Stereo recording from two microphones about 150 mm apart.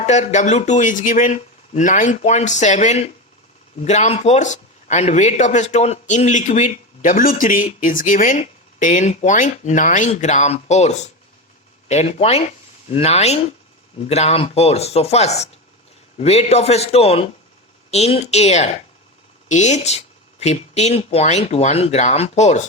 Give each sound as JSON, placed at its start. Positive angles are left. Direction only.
{"t": 0.0, "sound": "a man's voice", "side_deg": 50}